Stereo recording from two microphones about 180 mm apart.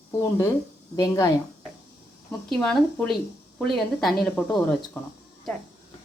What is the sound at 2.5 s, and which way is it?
A woman's voice, 5° left (ahead or behind).